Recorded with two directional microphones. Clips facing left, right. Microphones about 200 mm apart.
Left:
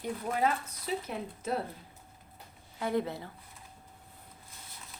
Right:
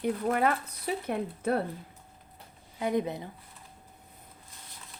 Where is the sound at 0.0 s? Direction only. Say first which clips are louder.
Right 4 dB; 60° right (ahead or behind).